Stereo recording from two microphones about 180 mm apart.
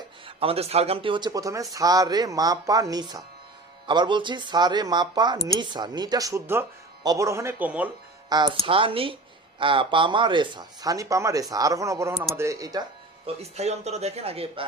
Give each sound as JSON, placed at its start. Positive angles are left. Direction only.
{"t": 0.3, "sound": "speech", "side_deg": -30}
{"t": 8.3, "sound": "speech", "side_deg": -25}
{"t": 13.2, "sound": "speech", "side_deg": -35}